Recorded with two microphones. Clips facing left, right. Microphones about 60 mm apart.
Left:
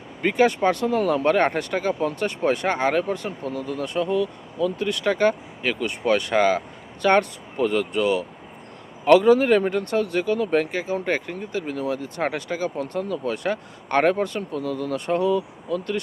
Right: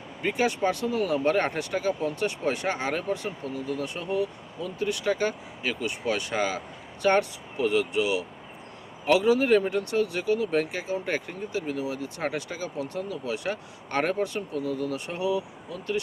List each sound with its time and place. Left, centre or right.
0.2 s speech: left